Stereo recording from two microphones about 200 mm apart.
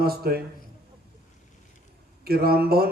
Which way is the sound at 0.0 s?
50° right (ahead or behind).